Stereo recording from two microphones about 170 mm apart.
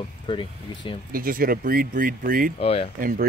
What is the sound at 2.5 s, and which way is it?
Speech, 35° left (ahead or behind).